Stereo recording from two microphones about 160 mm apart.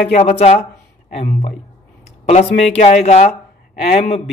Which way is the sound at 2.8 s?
45° left (ahead or behind).